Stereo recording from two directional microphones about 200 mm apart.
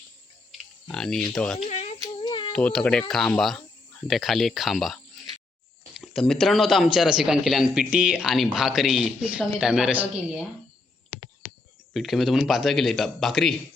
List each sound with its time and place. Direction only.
0.9 s a man's voice: centre (ahead or behind)
1.6 s a sound: 35° left (ahead or behind)
2.1 s humming: 25° left (ahead or behind)
2.5 s a man's voice: 5° left (ahead or behind)
11.9 s a man's voice: centre (ahead or behind)